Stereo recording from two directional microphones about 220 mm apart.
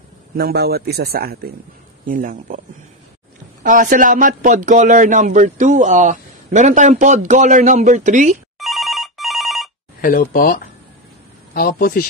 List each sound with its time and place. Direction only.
0.4 s a man's voice: 45° right (ahead or behind)
3.6 s speech: 35° right (ahead or behind)
8.5 s telephone bell ringing: centre (ahead or behind)
10.0 s speech: 40° left (ahead or behind)